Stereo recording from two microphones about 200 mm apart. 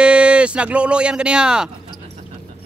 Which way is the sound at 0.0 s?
5° right (ahead or behind).